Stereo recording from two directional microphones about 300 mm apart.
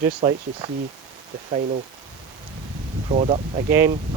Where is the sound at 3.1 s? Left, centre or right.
Right.